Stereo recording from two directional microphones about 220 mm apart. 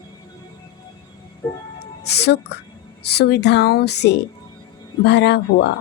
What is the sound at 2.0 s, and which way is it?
A woman's voice, 50° left (ahead or behind).